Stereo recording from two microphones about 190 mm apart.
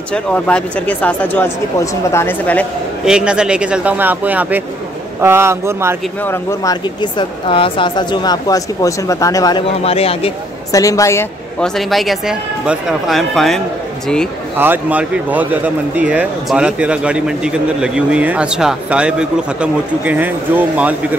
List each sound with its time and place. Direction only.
0.1 s speech: 5° left (ahead or behind)
3.1 s speech: 5° right (ahead or behind)
6.2 s speech: 15° left (ahead or behind)
9.8 s speech: 30° left (ahead or behind)
10.7 s speech: 15° left (ahead or behind)
11.6 s speech: centre (ahead or behind)
14.6 s speech: 10° right (ahead or behind)